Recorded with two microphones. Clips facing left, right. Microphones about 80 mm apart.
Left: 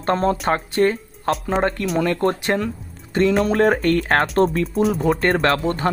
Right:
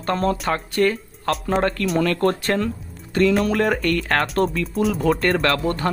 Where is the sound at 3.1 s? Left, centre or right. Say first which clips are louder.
Even; left.